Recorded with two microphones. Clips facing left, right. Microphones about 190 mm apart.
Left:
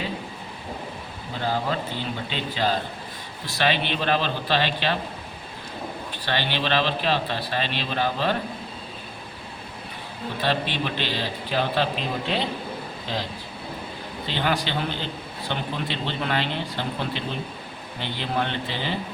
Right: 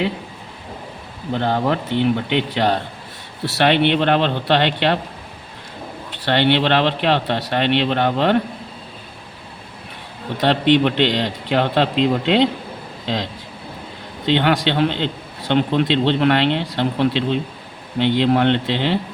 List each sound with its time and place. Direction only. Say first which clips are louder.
1.3 s a man's voice: right 7 dB; 65° right (ahead or behind)
6.1 s a man's voice: right 12 dB; 70° right (ahead or behind)
10.3 s a man's voice: right 11 dB; 70° right (ahead or behind)
14.3 s a man's voice: right 9 dB; 75° right (ahead or behind)